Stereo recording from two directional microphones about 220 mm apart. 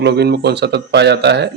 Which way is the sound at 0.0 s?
50° right (ahead or behind).